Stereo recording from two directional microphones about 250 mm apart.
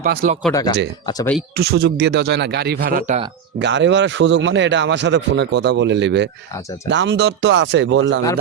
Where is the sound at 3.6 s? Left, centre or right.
Right.